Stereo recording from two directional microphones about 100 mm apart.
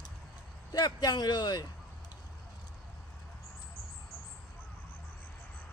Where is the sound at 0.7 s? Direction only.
40° left (ahead or behind).